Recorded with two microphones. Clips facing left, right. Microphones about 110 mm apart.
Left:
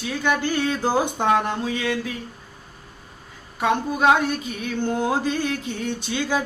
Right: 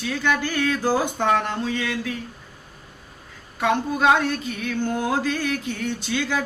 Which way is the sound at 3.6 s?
15° left (ahead or behind).